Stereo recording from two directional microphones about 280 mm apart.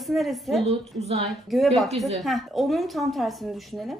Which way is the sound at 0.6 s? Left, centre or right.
Right.